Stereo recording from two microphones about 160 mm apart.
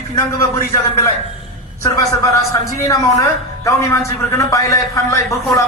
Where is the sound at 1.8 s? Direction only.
20° left (ahead or behind).